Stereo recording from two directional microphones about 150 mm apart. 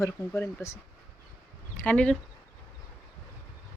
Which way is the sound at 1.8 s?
10° left (ahead or behind).